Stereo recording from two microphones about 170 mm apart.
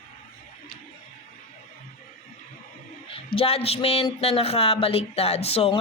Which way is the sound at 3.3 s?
35° left (ahead or behind).